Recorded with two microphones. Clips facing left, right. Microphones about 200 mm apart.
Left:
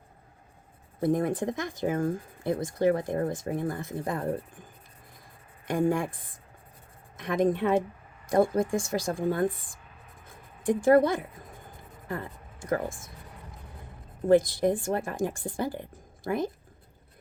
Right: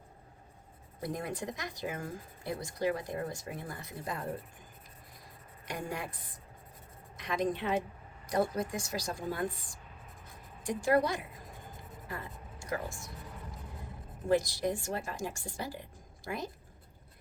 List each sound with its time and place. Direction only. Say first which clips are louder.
0.9 s speech: left 11 dB; 50° left (ahead or behind)
5.6 s speech: left 12 dB; 50° left (ahead or behind)
7.2 s speech: left 8 dB; 50° left (ahead or behind)
14.3 s speech: left 8 dB; 55° left (ahead or behind)